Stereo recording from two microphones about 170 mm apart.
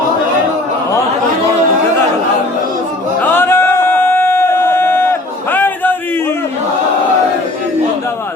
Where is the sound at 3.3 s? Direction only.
15° left (ahead or behind).